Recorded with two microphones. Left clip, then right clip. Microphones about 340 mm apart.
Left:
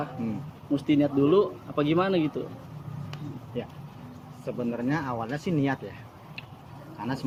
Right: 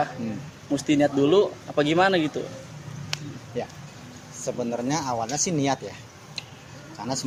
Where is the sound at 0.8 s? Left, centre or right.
Right.